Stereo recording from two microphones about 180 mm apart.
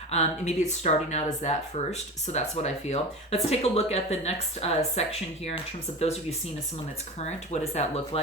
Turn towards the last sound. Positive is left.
turn(degrees=35)  # may be behind; listen again after turning